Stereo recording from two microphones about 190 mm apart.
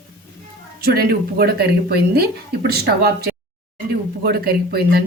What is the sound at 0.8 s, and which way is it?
Speech, 55° right (ahead or behind).